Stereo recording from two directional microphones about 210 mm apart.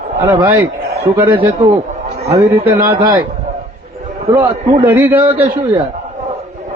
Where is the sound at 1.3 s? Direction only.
25° right (ahead or behind).